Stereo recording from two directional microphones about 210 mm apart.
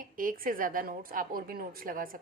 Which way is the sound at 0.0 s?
40° right (ahead or behind).